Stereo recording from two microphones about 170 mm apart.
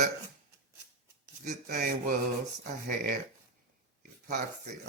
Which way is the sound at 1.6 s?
55° right (ahead or behind).